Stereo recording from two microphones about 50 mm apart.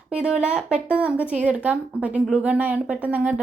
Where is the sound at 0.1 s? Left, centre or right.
Centre.